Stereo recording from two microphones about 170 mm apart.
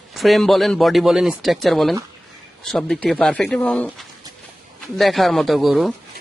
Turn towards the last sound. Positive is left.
turn(degrees=0)  # may be behind; listen again after turning